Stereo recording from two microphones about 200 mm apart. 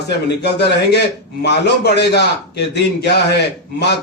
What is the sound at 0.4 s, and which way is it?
A man's voice, 55° left (ahead or behind).